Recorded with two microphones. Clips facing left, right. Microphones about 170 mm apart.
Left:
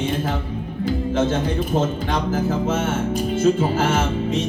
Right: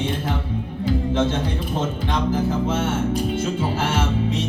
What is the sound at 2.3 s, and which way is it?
Music, 45° left (ahead or behind).